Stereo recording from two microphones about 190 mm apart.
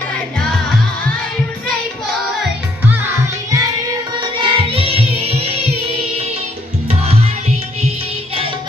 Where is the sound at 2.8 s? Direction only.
10° right (ahead or behind); by 6.3 s 35° right (ahead or behind).